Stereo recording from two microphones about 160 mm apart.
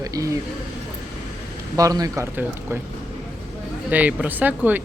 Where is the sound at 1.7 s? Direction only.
20° right (ahead or behind).